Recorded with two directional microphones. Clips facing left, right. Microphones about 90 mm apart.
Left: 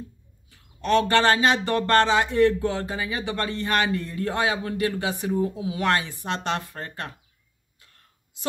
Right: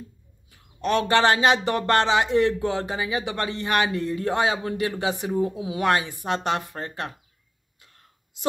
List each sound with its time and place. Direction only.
0.5 s speech: 20° right (ahead or behind)
7.8 s whispering: 20° right (ahead or behind)